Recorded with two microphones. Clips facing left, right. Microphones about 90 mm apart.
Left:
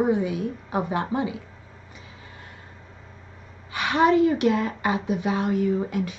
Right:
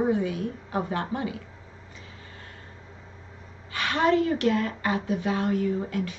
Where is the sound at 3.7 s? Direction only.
20° left (ahead or behind).